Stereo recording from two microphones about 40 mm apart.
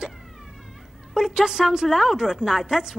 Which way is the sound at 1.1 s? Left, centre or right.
Centre.